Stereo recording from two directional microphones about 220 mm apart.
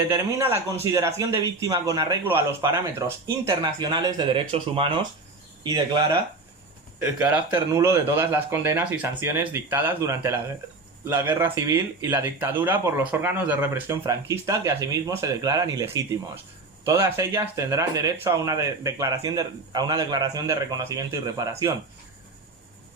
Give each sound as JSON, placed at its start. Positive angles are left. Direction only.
{"t": 0.1, "sound": "speech", "side_deg": -10}